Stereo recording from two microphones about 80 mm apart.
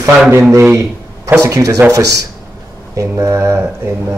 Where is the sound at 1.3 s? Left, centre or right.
Right.